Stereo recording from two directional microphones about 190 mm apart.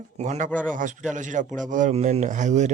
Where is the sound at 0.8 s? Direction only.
40° right (ahead or behind).